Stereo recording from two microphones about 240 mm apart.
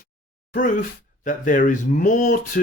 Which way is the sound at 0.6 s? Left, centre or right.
Left.